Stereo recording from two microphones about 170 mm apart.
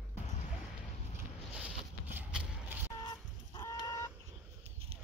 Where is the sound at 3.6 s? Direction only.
15° left (ahead or behind).